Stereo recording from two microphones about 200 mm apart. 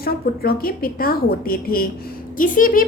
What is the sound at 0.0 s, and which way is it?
A woman's voice, 50° left (ahead or behind).